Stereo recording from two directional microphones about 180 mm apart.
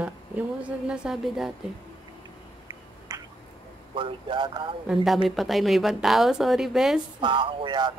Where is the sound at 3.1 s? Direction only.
20° right (ahead or behind).